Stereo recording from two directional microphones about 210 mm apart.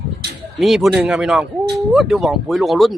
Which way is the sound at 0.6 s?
Centre (ahead or behind).